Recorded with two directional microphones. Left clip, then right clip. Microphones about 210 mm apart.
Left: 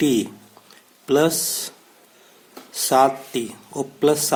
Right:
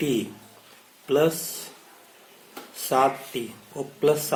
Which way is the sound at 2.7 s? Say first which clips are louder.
Left 5 dB; 45° left (ahead or behind).